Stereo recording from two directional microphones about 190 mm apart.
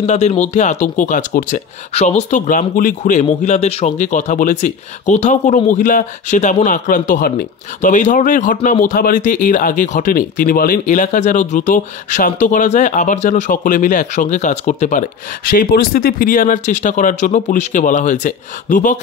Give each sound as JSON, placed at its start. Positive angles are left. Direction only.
{"t": 0.0, "sound": "speech", "side_deg": 35}